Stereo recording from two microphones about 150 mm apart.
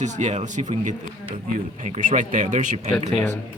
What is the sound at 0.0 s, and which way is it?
Speech, 50° right (ahead or behind).